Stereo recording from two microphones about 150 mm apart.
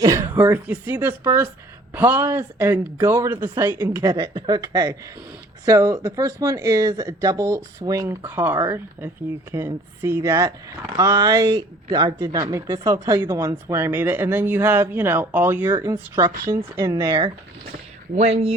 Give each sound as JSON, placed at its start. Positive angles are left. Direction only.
{"t": 0.0, "sound": "speech", "side_deg": -20}
{"t": 4.1, "sound": "speech", "side_deg": -30}
{"t": 10.9, "sound": "speech", "side_deg": -25}
{"t": 18.1, "sound": "speech", "side_deg": -50}